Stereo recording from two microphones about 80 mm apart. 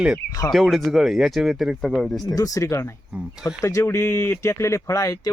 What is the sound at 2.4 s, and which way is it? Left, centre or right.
Speech, left.